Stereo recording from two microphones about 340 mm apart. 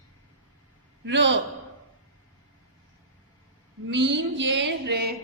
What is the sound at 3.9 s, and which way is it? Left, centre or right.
A woman's voice, right.